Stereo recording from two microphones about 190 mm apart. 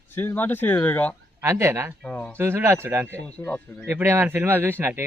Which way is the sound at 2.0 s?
5° left (ahead or behind).